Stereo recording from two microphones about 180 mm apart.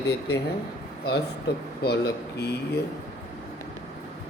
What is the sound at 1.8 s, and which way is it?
Speech, 65° left (ahead or behind).